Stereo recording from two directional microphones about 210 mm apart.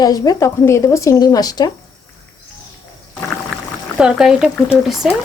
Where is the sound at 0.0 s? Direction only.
15° left (ahead or behind).